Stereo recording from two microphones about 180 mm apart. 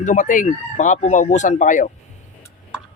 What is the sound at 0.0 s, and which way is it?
Speech, 45° left (ahead or behind).